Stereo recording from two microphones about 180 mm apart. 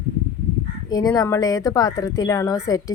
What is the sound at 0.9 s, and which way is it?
A woman's voice, 20° left (ahead or behind).